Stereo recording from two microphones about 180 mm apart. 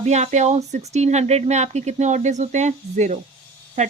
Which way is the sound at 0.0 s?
40° right (ahead or behind).